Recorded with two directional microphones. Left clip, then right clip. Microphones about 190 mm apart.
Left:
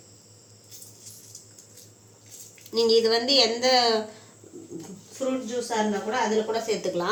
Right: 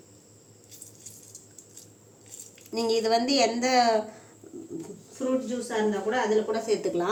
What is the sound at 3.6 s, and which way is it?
Speech, 40° right (ahead or behind).